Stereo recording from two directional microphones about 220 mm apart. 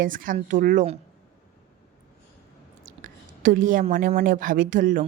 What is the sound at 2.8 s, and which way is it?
A woman's voice, 40° right (ahead or behind).